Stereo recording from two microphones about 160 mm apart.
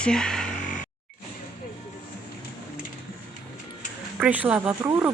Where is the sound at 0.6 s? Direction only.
55° left (ahead or behind).